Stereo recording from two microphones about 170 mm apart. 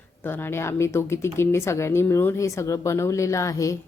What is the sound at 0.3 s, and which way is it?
A woman's voice, 15° left (ahead or behind).